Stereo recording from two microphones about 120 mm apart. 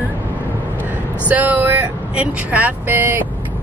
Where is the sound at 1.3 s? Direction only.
15° right (ahead or behind).